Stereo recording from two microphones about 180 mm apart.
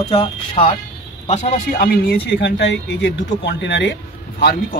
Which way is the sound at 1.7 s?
60° left (ahead or behind).